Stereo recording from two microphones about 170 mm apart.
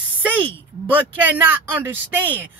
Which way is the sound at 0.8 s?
10° right (ahead or behind).